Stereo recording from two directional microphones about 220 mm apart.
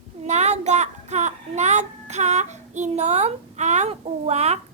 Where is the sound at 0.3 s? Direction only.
30° right (ahead or behind).